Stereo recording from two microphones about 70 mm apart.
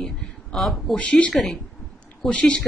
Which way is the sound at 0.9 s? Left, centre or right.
Centre.